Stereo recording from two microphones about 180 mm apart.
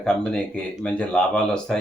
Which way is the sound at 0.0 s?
5° left (ahead or behind).